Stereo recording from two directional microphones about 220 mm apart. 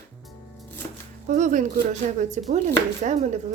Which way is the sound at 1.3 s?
35° right (ahead or behind).